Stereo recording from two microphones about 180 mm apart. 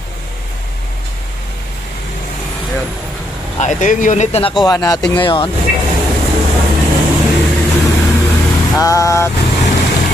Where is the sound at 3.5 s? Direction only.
45° left (ahead or behind).